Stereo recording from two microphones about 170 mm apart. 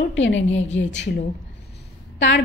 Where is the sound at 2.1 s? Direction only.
90° left.